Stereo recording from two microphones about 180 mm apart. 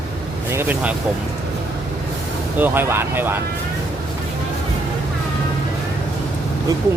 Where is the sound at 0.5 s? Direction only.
10° right (ahead or behind).